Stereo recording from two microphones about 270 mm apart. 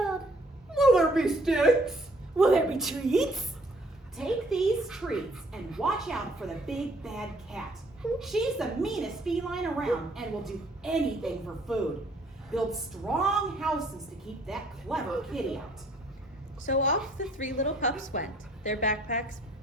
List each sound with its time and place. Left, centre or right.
0.7 s a woman's voice: centre
16.6 s a woman's voice: left